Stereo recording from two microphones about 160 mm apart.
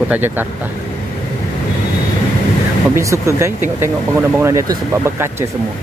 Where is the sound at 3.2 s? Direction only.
15° right (ahead or behind).